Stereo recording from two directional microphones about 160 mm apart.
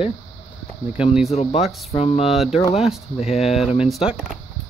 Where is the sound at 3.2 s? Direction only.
40° left (ahead or behind).